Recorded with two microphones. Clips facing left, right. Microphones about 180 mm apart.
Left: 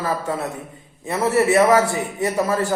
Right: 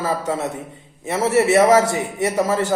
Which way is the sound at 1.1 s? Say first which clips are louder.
Right 1 dB; 20° right (ahead or behind).